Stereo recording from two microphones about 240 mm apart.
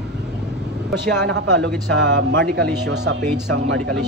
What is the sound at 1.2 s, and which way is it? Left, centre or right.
A man's voice, right.